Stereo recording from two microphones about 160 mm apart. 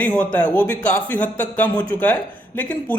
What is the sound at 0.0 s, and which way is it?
A man's voice, 10° left (ahead or behind).